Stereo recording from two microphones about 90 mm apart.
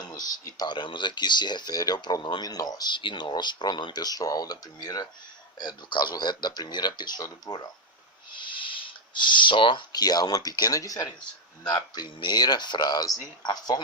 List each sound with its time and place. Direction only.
0.0 s speech: 45° left (ahead or behind)
8.3 s speech: 65° left (ahead or behind); by 11.1 s 40° left (ahead or behind)
11.6 s speech: 55° left (ahead or behind)